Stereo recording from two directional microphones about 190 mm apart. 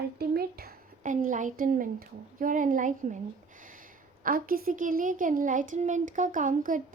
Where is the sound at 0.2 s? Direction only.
55° right (ahead or behind).